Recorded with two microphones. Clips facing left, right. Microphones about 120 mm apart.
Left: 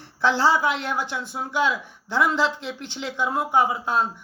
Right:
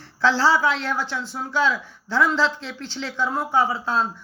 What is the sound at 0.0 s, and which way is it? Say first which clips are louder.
Speech: right 1 dB; 15° left (ahead or behind).